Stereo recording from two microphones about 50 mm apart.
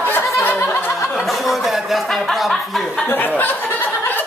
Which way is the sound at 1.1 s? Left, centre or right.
Centre.